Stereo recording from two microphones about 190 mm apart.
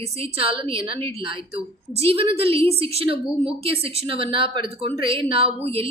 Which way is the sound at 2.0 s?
30° right (ahead or behind).